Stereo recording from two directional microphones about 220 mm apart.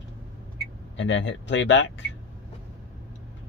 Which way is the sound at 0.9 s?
55° left (ahead or behind).